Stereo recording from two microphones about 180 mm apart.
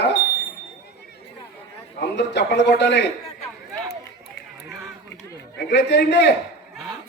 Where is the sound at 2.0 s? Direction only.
70° left (ahead or behind).